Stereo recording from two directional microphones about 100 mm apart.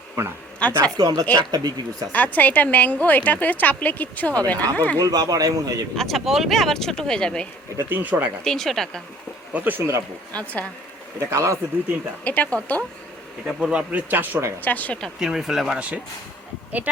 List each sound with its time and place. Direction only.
0.6 s a woman's voice: 10° left (ahead or behind)
0.9 s speech: 45° right (ahead or behind)
2.1 s a woman's voice: 15° left (ahead or behind)
4.9 s speech: 40° right (ahead or behind)
6.0 s speech: centre (ahead or behind)
7.8 s a man's voice: 20° right (ahead or behind)
8.4 s speech: 5° left (ahead or behind)
9.5 s speech: 15° right (ahead or behind)
10.3 s a woman's voice: 15° left (ahead or behind)
11.2 s speech: 30° right (ahead or behind)
12.2 s a woman's voice: 15° left (ahead or behind)
13.6 s a man's voice: 10° right (ahead or behind)
14.6 s a woman's voice: 15° left (ahead or behind)
15.2 s speech: 5° right (ahead or behind)